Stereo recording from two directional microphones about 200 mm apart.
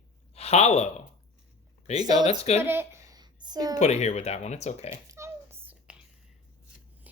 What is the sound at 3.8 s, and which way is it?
Speech, 35° left (ahead or behind).